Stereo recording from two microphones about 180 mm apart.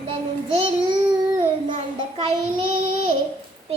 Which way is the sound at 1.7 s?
35° right (ahead or behind).